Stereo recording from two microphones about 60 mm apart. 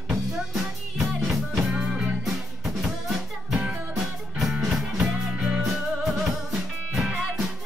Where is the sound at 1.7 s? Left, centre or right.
Right.